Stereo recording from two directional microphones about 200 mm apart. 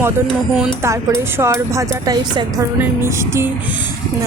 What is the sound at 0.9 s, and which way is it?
A woman's voice, 15° right (ahead or behind).